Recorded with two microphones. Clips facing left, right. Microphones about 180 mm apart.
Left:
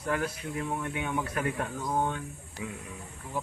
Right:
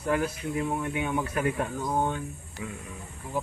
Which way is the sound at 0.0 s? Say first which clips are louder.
Right 4 dB; 5° right (ahead or behind).